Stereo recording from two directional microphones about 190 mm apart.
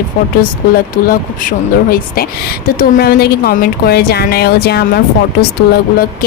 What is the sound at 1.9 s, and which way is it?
A woman's voice, 50° left (ahead or behind).